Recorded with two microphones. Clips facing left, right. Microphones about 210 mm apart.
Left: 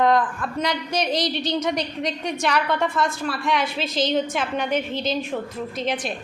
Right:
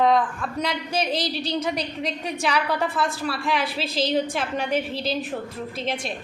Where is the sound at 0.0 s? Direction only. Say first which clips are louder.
Left 1 dB; centre (ahead or behind).